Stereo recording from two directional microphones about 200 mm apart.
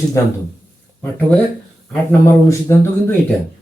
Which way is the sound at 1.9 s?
10° left (ahead or behind).